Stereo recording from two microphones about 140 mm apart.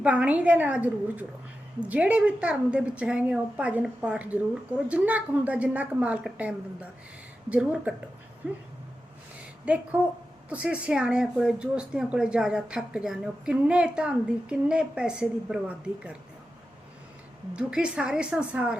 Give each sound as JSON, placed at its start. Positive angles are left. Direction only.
{"t": 0.0, "sound": "a woman's voice", "side_deg": -10}
{"t": 9.6, "sound": "a woman's voice", "side_deg": -10}
{"t": 17.5, "sound": "a woman's voice", "side_deg": -5}